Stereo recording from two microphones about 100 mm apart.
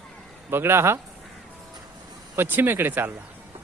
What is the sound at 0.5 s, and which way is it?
Speech, 25° right (ahead or behind).